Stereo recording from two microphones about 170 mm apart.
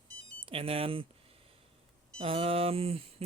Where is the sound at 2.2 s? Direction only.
35° right (ahead or behind).